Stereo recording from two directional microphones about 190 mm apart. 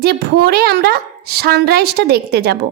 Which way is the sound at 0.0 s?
55° right (ahead or behind).